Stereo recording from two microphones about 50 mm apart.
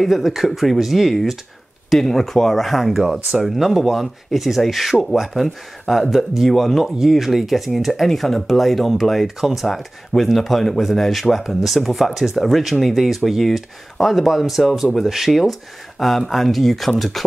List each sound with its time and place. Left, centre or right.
0.0 s speech: centre
1.9 s speech: centre